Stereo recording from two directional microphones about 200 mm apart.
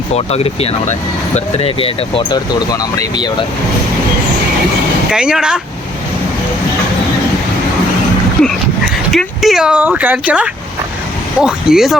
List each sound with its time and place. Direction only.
0.1 s speech: 30° left (ahead or behind)
5.1 s speech: 5° right (ahead or behind)
9.1 s speech: centre (ahead or behind)